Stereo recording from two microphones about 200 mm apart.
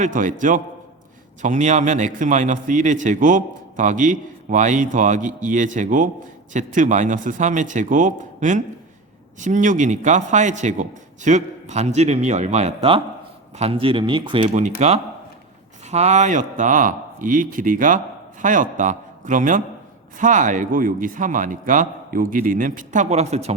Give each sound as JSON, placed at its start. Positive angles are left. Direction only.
{"t": 0.0, "sound": "a man's voice", "side_deg": -40}